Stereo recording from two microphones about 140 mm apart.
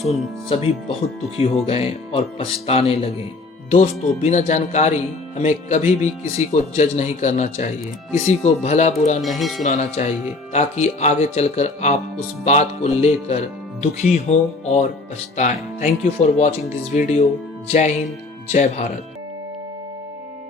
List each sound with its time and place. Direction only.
0.1 s speech: 45° left (ahead or behind)
3.7 s speech: 55° left (ahead or behind)
9.2 s speech: centre (ahead or behind)
9.6 s speech: 55° left (ahead or behind)